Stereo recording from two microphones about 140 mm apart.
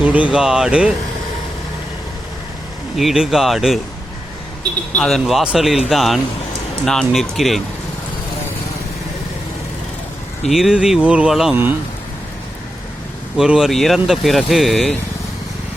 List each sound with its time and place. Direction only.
0.0 s speech: 10° right (ahead or behind)
2.9 s speech: centre (ahead or behind)
4.9 s speech: 5° left (ahead or behind)
10.4 s speech: 5° right (ahead or behind)
13.3 s speech: 5° right (ahead or behind)